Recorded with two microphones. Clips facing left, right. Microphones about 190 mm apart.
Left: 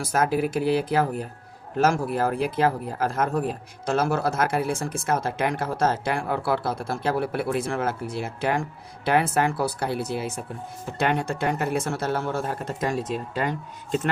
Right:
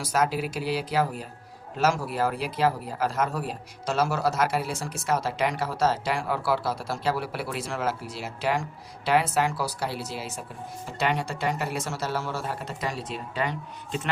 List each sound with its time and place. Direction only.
0.0 s speech: 50° left (ahead or behind)